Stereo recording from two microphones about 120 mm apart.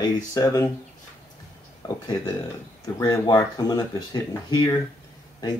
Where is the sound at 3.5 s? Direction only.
30° left (ahead or behind).